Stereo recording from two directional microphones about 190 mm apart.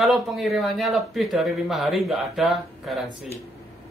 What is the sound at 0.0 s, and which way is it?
Speech, centre (ahead or behind).